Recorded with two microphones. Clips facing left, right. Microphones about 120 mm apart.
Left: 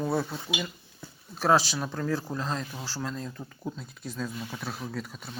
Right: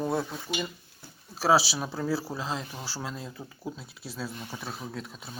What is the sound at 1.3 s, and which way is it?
Speech, 5° right (ahead or behind).